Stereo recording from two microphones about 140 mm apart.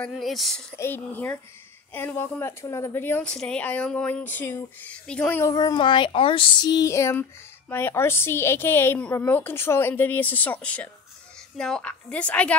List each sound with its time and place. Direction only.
0.0 s speech: centre (ahead or behind)
0.7 s a woman's voice: 15° left (ahead or behind)
5.4 s child singing: 25° left (ahead or behind)
7.7 s a woman's voice: 15° left (ahead or behind)